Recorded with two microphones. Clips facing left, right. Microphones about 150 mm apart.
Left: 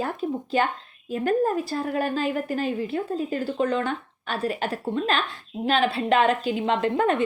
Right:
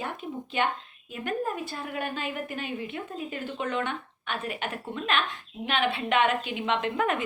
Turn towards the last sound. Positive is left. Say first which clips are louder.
# left 5 dB
turn(degrees=30)  # may be behind; listen again after turning